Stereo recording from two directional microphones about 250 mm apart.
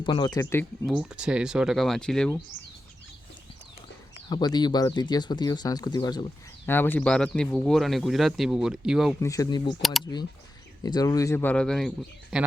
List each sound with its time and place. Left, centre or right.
0.0 s speech: centre
0.9 s speech: centre
4.3 s speech: centre
9.2 s speech: centre
10.8 s speech: centre